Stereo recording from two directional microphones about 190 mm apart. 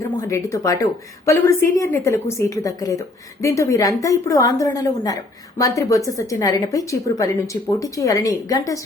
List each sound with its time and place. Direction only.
0.2 s a woman's voice: 15° left (ahead or behind)